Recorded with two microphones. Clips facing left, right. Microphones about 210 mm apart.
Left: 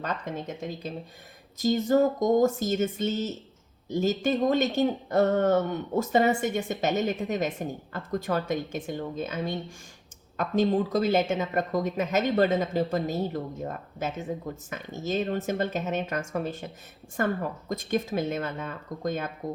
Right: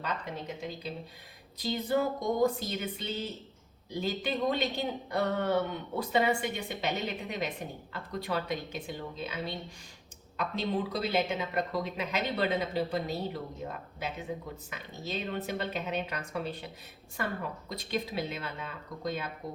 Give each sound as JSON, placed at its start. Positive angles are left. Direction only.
{"t": 0.0, "sound": "speech", "side_deg": 45}